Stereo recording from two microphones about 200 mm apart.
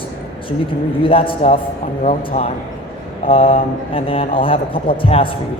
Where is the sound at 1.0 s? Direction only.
25° left (ahead or behind).